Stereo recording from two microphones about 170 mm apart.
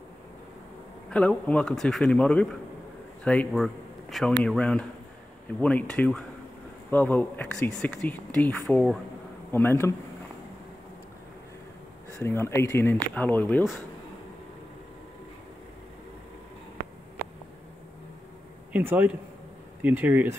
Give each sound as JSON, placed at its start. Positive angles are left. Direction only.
{"t": 1.1, "sound": "speech", "side_deg": 5}
{"t": 12.2, "sound": "speech", "side_deg": 15}
{"t": 18.7, "sound": "speech", "side_deg": -10}